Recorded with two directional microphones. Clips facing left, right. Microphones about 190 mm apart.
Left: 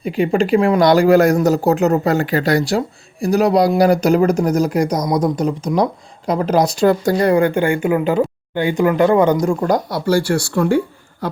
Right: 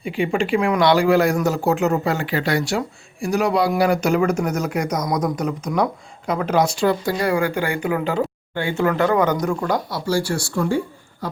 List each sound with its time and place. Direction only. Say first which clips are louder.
0.0 s speech: left 5 dB; 40° left (ahead or behind)
7.5 s speech: left 6 dB; 25° left (ahead or behind)
9.0 s speech: left 5 dB; 30° left (ahead or behind)
10.1 s speech: left 5 dB; 60° left (ahead or behind)